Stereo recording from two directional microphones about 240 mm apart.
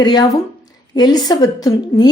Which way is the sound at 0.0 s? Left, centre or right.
Centre.